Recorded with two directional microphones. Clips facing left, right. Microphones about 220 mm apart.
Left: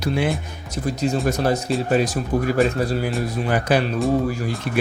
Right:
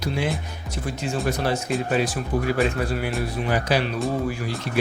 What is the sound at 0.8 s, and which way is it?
Speech, 40° left (ahead or behind).